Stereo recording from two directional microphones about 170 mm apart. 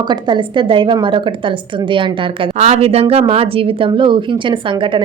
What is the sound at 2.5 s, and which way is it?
Speech, 45° right (ahead or behind).